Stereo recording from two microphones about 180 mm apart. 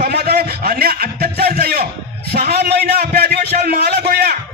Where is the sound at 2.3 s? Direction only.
60° right (ahead or behind).